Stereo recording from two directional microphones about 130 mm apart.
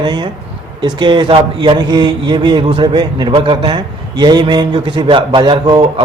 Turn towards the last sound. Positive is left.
turn(degrees=-35)  # may be behind; listen again after turning